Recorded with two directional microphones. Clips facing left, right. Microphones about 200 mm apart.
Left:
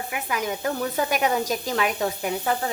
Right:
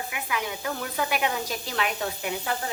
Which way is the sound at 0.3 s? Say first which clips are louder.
Left 5 dB; 45° left (ahead or behind).